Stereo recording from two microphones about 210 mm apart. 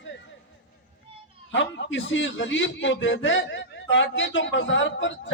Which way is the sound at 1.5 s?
60° left (ahead or behind).